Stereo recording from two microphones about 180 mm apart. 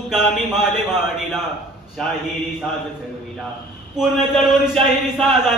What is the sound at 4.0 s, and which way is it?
A man's voice, centre (ahead or behind).